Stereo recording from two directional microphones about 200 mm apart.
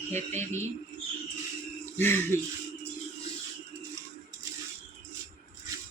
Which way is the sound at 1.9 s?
10° left (ahead or behind).